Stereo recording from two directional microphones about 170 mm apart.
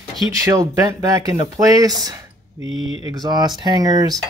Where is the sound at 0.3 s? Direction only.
20° right (ahead or behind).